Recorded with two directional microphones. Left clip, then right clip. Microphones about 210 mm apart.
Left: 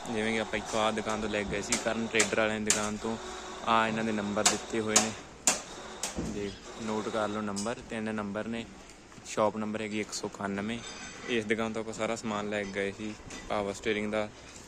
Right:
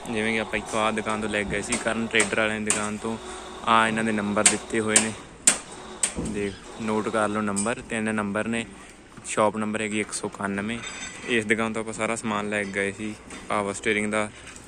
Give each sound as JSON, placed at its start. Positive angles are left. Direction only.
{"t": 0.1, "sound": "speech", "side_deg": 10}
{"t": 4.9, "sound": "typewriter", "side_deg": 35}
{"t": 6.9, "sound": "a man's voice", "side_deg": -10}